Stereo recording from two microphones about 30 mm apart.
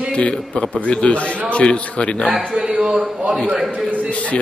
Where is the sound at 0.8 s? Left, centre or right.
Left.